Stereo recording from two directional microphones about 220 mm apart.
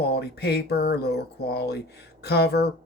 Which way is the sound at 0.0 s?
50° left (ahead or behind).